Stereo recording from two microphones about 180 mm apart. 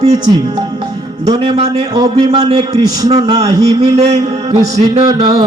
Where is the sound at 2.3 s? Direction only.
35° right (ahead or behind).